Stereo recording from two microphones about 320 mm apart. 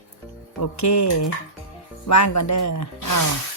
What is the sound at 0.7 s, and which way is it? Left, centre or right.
Speech, left.